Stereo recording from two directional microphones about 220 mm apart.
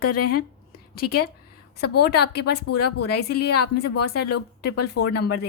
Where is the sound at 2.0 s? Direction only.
50° left (ahead or behind).